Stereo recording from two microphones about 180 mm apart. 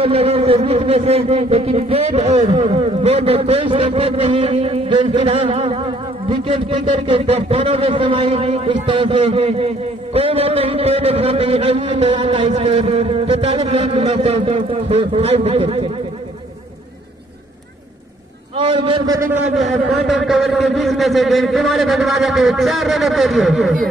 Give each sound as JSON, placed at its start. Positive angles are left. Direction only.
{"t": 0.0, "sound": "speech", "side_deg": -35}
{"t": 10.1, "sound": "a sound", "side_deg": -35}
{"t": 18.6, "sound": "a man's voice", "side_deg": -30}
{"t": 19.1, "sound": "a man's voice", "side_deg": -15}
{"t": 19.5, "sound": "a man's voice", "side_deg": 0}